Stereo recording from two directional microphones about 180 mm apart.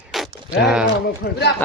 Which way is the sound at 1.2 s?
60° left (ahead or behind).